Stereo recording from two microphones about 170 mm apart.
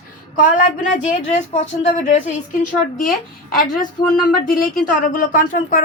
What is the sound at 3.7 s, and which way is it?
Speech, 55° left (ahead or behind).